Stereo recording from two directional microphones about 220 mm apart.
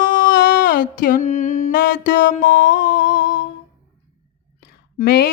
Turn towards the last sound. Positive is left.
turn(degrees=45)  # may be behind; listen again after turning